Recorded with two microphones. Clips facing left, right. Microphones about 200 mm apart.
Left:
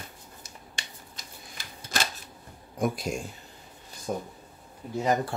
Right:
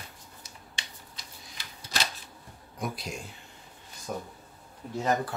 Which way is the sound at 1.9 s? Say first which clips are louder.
Left 2 dB; 50° left (ahead or behind).